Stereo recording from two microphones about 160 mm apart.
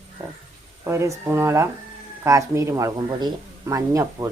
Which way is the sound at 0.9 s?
15° right (ahead or behind).